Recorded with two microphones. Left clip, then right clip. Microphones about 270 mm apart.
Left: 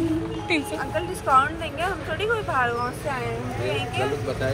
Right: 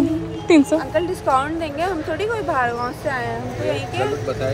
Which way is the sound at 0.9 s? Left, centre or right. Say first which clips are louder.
Left 1 dB; right.